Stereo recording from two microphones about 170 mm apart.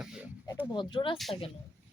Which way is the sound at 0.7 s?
30° left (ahead or behind).